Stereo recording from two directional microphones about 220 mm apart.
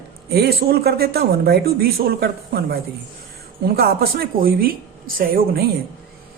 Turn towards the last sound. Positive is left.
turn(degrees=-40)  # may be behind; listen again after turning